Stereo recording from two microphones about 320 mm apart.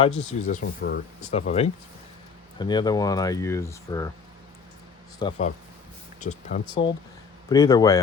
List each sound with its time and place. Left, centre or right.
0.0 s speech: left
5.2 s speech: centre